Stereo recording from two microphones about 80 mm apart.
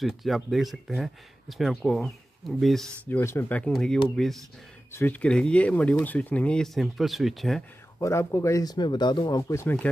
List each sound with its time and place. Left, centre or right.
0.0 s speech: centre
3.1 s speech: left
3.7 s speech: centre
4.9 s speech: left
6.6 s speech: centre
8.0 s speech: left
8.6 s speech: left
9.5 s speech: left